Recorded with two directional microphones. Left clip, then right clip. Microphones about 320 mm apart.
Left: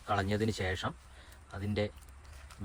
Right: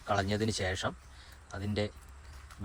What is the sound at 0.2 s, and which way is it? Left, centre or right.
A man's voice, centre.